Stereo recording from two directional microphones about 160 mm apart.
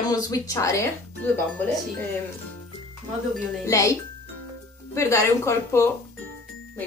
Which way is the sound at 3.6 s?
20° left (ahead or behind).